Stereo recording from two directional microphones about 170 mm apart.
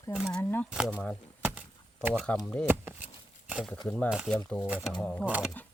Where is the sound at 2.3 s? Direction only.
5° left (ahead or behind).